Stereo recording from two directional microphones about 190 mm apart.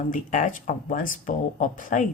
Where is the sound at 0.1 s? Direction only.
40° left (ahead or behind).